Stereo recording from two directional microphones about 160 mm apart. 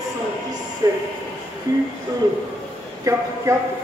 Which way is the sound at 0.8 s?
25° right (ahead or behind).